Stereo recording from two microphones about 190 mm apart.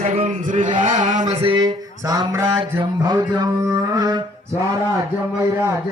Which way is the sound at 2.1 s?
15° right (ahead or behind).